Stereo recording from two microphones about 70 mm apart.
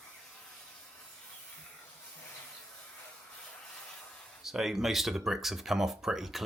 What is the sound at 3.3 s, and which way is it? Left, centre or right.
Rub, centre.